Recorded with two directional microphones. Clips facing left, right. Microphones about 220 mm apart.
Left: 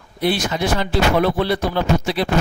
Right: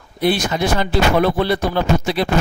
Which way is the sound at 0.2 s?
50° right (ahead or behind).